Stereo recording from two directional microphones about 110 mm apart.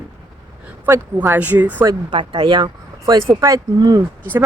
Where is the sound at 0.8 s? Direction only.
25° right (ahead or behind).